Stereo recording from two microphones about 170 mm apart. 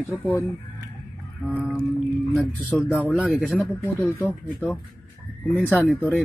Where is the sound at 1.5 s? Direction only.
5° right (ahead or behind).